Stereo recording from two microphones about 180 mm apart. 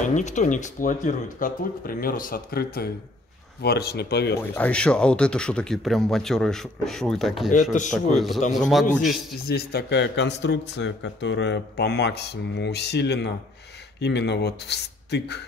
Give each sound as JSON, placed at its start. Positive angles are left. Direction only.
{"t": 0.1, "sound": "speech", "side_deg": 40}
{"t": 4.4, "sound": "speech", "side_deg": 10}
{"t": 9.5, "sound": "speech", "side_deg": 60}